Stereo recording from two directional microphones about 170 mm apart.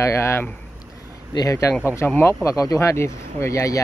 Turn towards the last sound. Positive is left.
turn(degrees=20)  # may be behind; listen again after turning